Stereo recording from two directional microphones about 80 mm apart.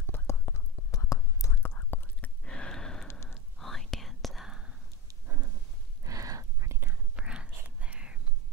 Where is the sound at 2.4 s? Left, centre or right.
Centre.